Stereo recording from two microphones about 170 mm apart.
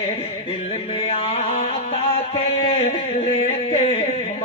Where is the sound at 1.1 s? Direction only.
35° left (ahead or behind).